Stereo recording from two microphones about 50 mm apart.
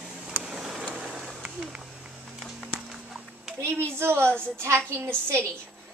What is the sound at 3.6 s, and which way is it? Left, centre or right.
Speech, right.